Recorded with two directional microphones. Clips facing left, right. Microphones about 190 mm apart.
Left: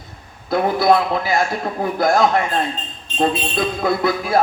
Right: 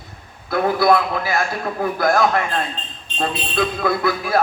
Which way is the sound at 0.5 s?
25° left (ahead or behind).